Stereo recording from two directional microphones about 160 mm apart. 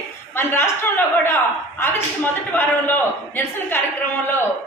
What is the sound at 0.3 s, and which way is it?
A woman's voice, 15° left (ahead or behind).